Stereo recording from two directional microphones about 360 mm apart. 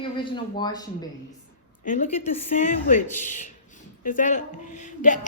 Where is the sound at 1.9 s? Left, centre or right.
Left.